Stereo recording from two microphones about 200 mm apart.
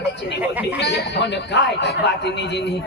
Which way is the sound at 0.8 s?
60° left (ahead or behind).